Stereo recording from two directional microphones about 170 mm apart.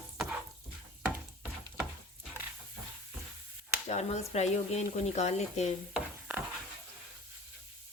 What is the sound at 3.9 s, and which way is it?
Speech, 40° left (ahead or behind).